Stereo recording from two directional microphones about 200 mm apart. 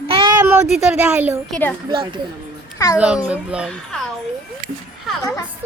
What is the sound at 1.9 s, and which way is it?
Speech, 25° right (ahead or behind).